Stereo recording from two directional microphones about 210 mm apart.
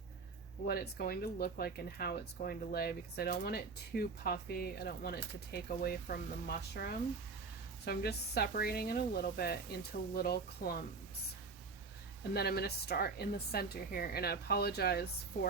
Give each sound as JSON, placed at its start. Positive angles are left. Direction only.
{"t": 0.7, "sound": "speech", "side_deg": 45}
{"t": 12.3, "sound": "speech", "side_deg": 50}